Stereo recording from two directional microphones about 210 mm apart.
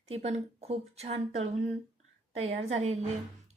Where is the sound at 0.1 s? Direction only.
30° right (ahead or behind).